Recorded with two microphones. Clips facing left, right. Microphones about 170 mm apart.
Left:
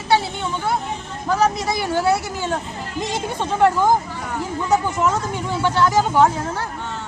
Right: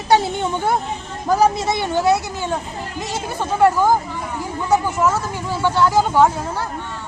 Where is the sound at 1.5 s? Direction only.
25° right (ahead or behind).